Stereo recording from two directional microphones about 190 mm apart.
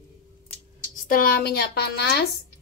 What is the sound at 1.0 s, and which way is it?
Speech, 50° left (ahead or behind).